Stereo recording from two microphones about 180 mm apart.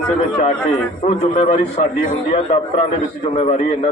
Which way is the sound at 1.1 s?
40° left (ahead or behind).